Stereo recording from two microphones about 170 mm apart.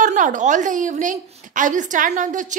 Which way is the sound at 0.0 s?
50° right (ahead or behind).